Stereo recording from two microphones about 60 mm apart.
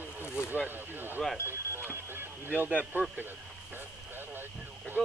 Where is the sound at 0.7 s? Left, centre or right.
Right.